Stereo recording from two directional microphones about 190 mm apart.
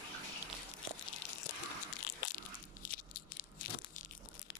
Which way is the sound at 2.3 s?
45° left (ahead or behind).